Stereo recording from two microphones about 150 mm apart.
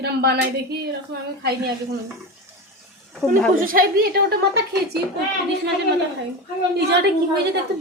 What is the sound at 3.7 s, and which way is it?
Speech, 75° right (ahead or behind).